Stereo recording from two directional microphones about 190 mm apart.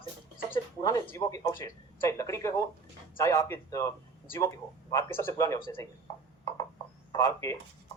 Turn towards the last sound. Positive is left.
turn(degrees=15)  # may be behind; listen again after turning